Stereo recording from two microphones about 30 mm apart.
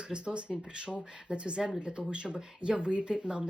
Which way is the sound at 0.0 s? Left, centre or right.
Right.